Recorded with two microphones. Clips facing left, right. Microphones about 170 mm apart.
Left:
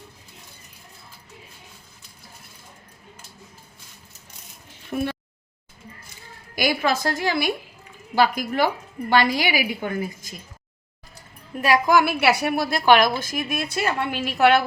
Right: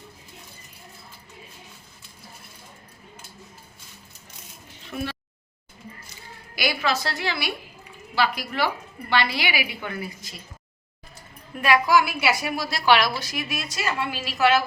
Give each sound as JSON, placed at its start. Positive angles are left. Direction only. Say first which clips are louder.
{"t": 4.9, "sound": "a woman's voice", "louder": "left 5 dB", "side_deg": 35}
{"t": 6.6, "sound": "a woman's voice", "louder": "left 3 dB", "side_deg": 45}
{"t": 11.6, "sound": "a woman's voice", "louder": "left 1 dB", "side_deg": 40}
{"t": 11.9, "sound": "a woman's voice", "louder": "left 3 dB", "side_deg": 65}